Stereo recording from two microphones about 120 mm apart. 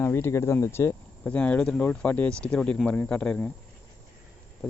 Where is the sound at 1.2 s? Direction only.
10° left (ahead or behind).